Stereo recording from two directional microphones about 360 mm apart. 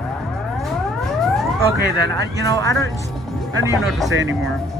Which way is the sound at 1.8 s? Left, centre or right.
Right.